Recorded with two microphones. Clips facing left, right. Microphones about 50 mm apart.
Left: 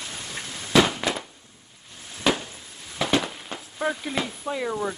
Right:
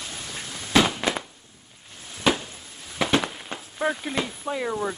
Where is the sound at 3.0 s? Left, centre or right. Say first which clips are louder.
Right 1 dB; right.